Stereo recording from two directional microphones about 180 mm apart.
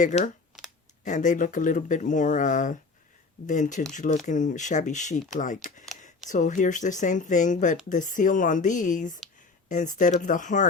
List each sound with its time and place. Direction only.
0.0 s speech: 45° left (ahead or behind)